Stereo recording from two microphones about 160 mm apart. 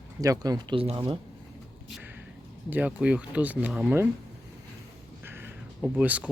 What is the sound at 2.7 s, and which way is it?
Speech, 10° right (ahead or behind).